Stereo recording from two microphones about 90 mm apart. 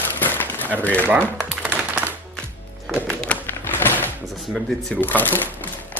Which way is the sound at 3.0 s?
10° left (ahead or behind).